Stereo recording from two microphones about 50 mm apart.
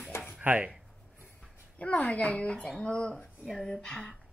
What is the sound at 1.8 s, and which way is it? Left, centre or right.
Speech, left.